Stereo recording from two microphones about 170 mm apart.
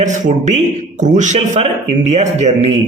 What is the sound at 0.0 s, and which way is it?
A man's voice, 45° right (ahead or behind).